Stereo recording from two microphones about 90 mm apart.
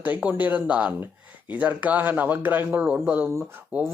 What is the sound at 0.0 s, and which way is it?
Speech, 15° right (ahead or behind).